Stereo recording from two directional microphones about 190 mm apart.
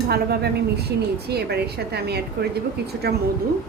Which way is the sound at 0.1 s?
55° right (ahead or behind).